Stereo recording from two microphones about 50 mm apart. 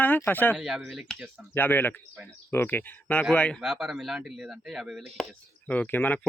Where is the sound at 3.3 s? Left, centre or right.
Left.